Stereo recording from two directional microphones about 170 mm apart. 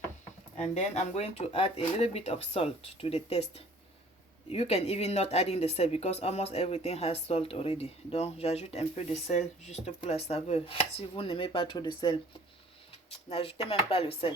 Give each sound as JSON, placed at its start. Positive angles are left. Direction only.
{"t": 0.5, "sound": "speech", "side_deg": 45}
{"t": 4.5, "sound": "speech", "side_deg": 40}
{"t": 13.3, "sound": "speech", "side_deg": 35}